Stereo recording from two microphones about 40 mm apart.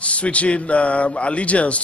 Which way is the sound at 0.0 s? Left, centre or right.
Left.